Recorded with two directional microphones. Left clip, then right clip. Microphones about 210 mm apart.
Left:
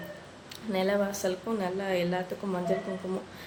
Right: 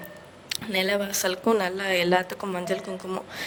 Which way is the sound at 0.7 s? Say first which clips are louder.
Right 2 dB; 50° right (ahead or behind).